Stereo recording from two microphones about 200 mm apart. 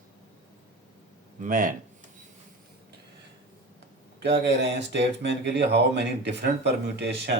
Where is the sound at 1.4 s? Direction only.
45° right (ahead or behind).